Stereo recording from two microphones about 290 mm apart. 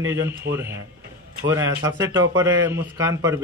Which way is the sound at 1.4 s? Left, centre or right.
Centre.